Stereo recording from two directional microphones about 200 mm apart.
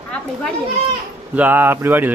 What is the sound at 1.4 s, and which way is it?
Speech, 10° right (ahead or behind).